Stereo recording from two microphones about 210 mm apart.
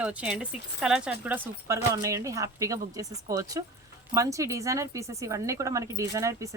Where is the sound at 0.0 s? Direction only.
5° right (ahead or behind).